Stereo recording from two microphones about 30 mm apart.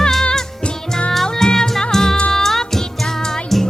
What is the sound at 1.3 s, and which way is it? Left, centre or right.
Music, left.